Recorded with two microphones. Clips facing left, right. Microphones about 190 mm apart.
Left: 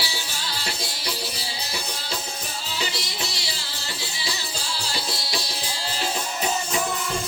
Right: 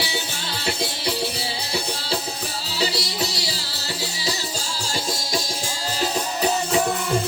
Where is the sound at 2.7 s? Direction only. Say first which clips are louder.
Right 7 dB; 35° right (ahead or behind).